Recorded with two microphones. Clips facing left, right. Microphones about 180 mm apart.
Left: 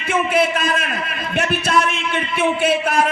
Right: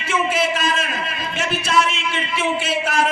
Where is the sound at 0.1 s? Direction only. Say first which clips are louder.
Left 3 dB; 55° left (ahead or behind).